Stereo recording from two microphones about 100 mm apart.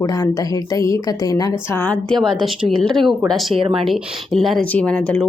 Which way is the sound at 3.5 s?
65° right (ahead or behind).